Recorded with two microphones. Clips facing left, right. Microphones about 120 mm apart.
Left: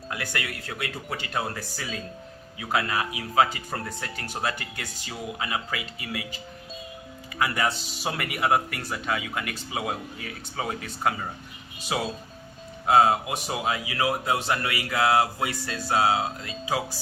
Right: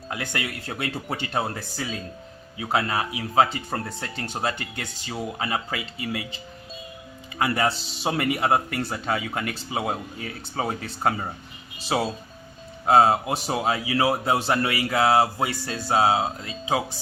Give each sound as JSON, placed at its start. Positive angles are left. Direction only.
{"t": 0.1, "sound": "a man's voice", "side_deg": -25}